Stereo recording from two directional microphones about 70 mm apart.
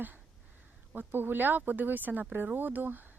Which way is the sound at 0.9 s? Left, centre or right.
Right.